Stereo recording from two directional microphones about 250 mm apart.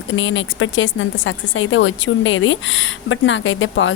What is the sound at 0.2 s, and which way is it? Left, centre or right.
Speech, left.